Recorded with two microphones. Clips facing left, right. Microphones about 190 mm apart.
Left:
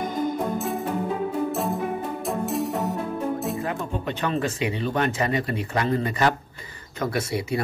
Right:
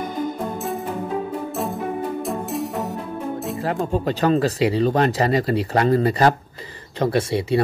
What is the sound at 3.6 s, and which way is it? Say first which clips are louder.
Speech: right 6 dB; 35° right (ahead or behind).